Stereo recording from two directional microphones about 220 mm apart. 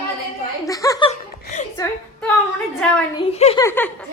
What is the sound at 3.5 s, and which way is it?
Speech, 10° left (ahead or behind).